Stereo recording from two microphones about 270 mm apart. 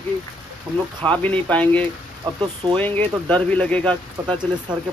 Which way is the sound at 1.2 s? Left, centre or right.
Centre.